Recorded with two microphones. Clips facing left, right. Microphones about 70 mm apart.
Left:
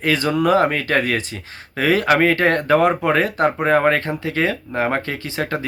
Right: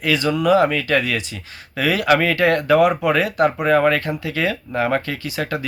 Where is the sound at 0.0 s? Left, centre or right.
Left.